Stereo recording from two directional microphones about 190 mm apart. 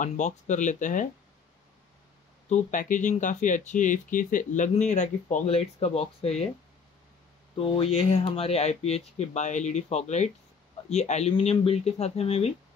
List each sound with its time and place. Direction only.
0.0 s speech: 40° left (ahead or behind)
2.5 s speech: 40° left (ahead or behind)
7.5 s speech: 30° left (ahead or behind)